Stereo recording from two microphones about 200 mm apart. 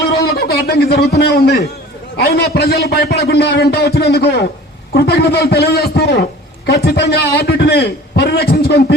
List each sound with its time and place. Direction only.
0.2 s a man's voice: 55° left (ahead or behind)